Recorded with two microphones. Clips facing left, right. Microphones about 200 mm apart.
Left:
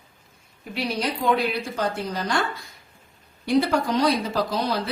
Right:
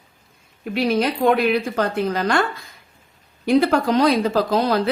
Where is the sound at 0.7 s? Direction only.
55° right (ahead or behind).